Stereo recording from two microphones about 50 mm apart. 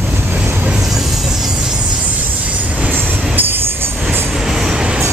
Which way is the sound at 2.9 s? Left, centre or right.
Right.